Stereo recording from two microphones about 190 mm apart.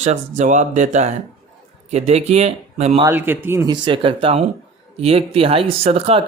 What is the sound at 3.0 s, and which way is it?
Speech, 10° right (ahead or behind).